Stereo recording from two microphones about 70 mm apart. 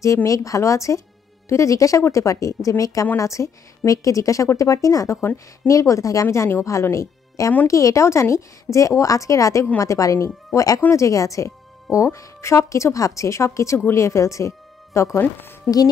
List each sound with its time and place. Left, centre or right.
0.0 s a woman's voice: left
15.1 s a woman's voice: left